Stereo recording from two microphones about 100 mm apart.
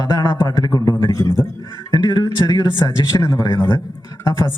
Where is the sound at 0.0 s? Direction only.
40° left (ahead or behind).